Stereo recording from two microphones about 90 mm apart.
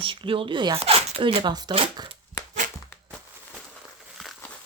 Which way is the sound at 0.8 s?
90° right.